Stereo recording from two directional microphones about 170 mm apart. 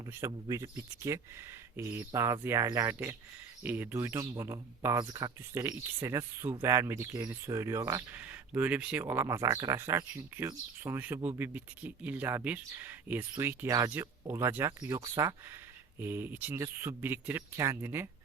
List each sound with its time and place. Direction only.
0.0 s speech: 15° right (ahead or behind)